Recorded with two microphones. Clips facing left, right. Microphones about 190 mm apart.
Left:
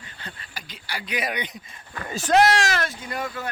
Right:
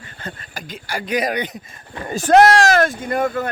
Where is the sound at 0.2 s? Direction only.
45° right (ahead or behind).